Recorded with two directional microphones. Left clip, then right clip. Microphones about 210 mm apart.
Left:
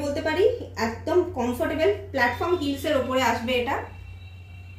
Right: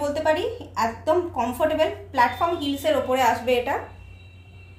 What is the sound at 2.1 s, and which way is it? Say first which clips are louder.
A woman's voice: right 3 dB; 50° right (ahead or behind).